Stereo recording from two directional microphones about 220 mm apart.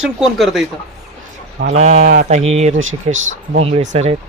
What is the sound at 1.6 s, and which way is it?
Speech, 30° right (ahead or behind).